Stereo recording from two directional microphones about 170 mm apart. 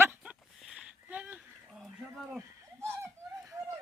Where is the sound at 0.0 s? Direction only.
10° right (ahead or behind).